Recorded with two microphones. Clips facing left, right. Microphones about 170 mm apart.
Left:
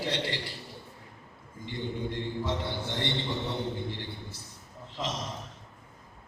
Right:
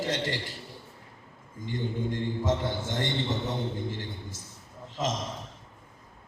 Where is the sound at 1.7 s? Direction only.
45° right (ahead or behind).